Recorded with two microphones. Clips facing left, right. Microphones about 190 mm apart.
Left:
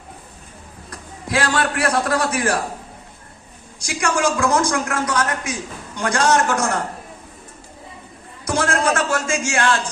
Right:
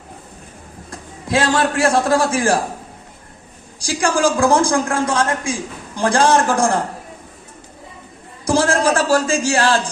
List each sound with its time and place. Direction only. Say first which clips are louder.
0.9 s a man's voice: right 4 dB; 25° right (ahead or behind)
3.8 s a man's voice: right 3 dB; 30° right (ahead or behind)
8.4 s a man's voice: right 4 dB; 30° right (ahead or behind)